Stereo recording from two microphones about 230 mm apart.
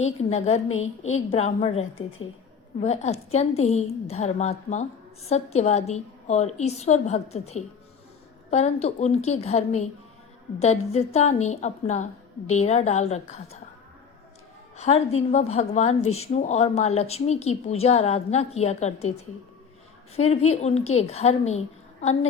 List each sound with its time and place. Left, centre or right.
0.0 s a woman's voice: left
0.7 s a woman's voice: left
1.3 s a woman's voice: left
14.8 s a woman's voice: left
20.1 s a woman's voice: left